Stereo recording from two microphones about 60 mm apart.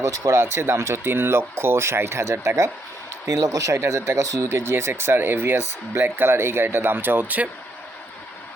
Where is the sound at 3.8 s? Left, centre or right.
Right.